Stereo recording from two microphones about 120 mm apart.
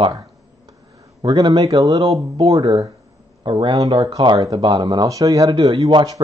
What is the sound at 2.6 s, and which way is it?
Speech, 50° right (ahead or behind).